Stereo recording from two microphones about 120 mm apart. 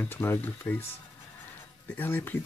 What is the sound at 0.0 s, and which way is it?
Speech, 20° left (ahead or behind).